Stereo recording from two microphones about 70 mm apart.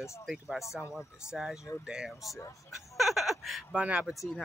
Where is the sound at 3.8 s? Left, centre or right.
Centre.